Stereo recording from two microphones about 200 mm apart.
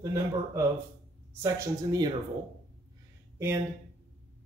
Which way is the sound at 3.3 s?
15° right (ahead or behind).